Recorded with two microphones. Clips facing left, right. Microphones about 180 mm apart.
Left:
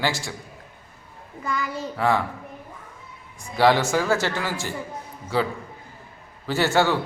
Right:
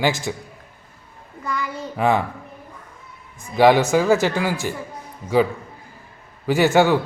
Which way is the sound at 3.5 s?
15° right (ahead or behind).